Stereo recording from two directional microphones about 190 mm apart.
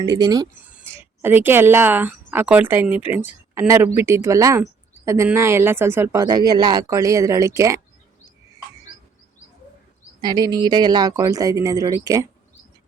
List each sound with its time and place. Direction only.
0.0 s speech: 20° right (ahead or behind)
0.6 s speech: 10° right (ahead or behind)
10.2 s speech: 20° right (ahead or behind)